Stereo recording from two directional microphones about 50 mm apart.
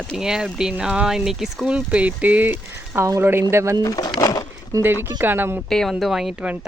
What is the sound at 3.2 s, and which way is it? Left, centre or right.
Speech, right.